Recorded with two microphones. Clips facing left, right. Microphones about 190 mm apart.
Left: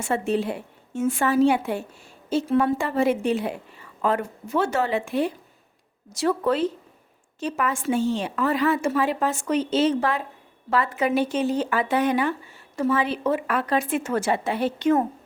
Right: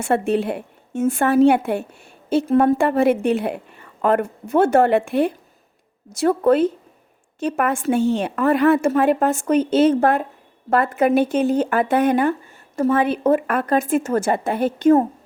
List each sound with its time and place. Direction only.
0.0 s a woman's voice: 60° right (ahead or behind); by 15.0 s 45° right (ahead or behind)